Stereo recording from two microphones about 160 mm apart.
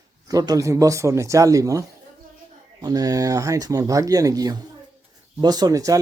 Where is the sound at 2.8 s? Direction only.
25° right (ahead or behind).